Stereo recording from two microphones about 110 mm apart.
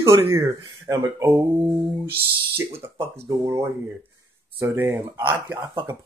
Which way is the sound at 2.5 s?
25° right (ahead or behind).